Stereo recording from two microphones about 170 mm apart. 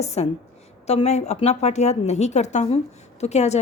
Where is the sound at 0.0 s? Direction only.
40° left (ahead or behind).